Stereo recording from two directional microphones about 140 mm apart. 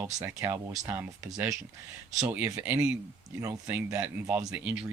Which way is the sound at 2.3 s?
20° right (ahead or behind).